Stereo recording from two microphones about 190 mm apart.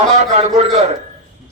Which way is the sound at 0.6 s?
35° right (ahead or behind).